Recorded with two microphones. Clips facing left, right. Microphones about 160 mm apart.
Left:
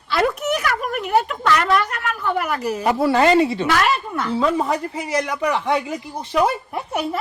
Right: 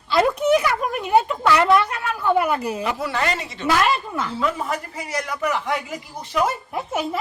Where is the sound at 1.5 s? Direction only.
15° right (ahead or behind).